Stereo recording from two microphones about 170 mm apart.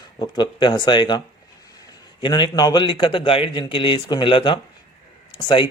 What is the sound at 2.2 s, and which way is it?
Speech, 25° left (ahead or behind).